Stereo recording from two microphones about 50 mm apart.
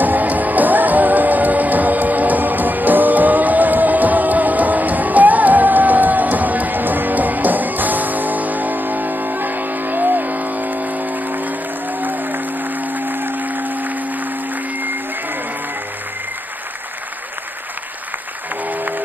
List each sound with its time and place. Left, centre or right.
0.0 s music: right